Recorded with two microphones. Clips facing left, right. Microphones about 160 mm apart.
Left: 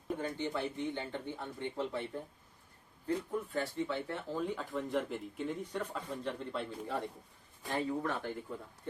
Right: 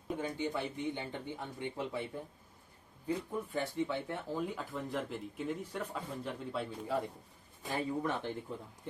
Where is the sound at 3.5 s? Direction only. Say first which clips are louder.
Right 2 dB; 15° right (ahead or behind).